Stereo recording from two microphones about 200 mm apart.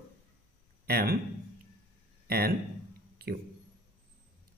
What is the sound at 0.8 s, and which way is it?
Speech, 50° right (ahead or behind).